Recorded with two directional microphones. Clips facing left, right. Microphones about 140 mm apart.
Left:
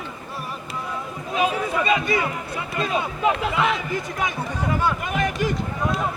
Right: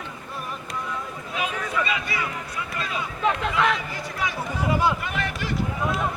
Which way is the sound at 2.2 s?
30° left (ahead or behind).